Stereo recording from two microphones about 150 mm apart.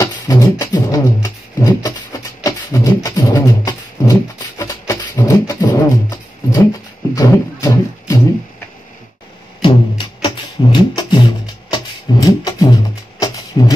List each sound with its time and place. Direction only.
0.0 s beatboxing: 25° left (ahead or behind)
7.2 s music: 20° left (ahead or behind)
9.6 s music: 35° left (ahead or behind)